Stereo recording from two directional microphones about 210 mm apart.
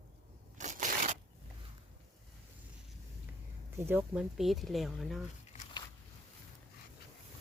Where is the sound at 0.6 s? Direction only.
35° right (ahead or behind).